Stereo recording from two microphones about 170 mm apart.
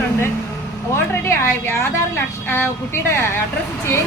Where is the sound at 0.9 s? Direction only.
15° left (ahead or behind).